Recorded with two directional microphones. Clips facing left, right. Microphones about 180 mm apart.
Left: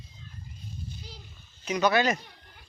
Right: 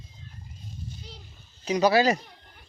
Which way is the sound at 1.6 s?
35° right (ahead or behind).